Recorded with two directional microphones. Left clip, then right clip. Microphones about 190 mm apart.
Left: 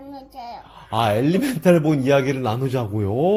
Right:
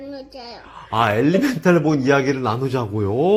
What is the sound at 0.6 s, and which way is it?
Speech, 45° left (ahead or behind).